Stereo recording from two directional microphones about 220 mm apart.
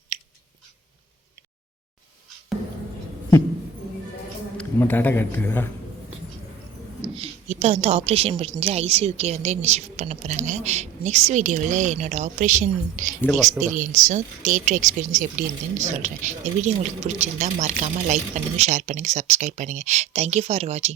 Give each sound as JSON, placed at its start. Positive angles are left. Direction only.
{"t": 4.5, "sound": "a man's voice", "side_deg": 10}
{"t": 7.2, "sound": "a woman's voice", "side_deg": -30}